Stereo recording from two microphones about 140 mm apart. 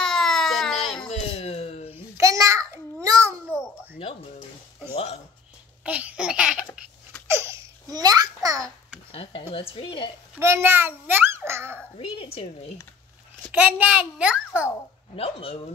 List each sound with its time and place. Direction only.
0.0 s baby cry: 5° left (ahead or behind)
1.3 s a sound: 45° left (ahead or behind)
2.1 s a sound: 20° right (ahead or behind)
4.9 s a sound: 45° left (ahead or behind)
5.9 s babbling: 10° right (ahead or behind)
7.2 s babbling: 20° right (ahead or behind)
9.1 s a woman's voice: 40° left (ahead or behind)
10.4 s a child's voice: 20° right (ahead or behind)
12.0 s a woman's voice: 40° left (ahead or behind)
13.5 s a child's voice: 10° right (ahead or behind)
15.1 s speech: 45° left (ahead or behind)